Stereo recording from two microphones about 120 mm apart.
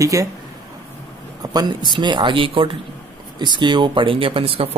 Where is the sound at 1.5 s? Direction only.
40° right (ahead or behind).